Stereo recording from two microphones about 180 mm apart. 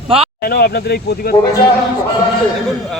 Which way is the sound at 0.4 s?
60° left (ahead or behind).